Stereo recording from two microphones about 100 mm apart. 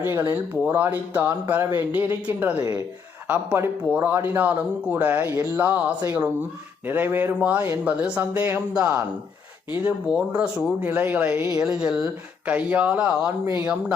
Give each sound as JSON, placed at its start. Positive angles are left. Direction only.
{"t": 0.0, "sound": "speech", "side_deg": -25}
{"t": 11.6, "sound": "speech", "side_deg": -10}
{"t": 13.4, "sound": "speech", "side_deg": -30}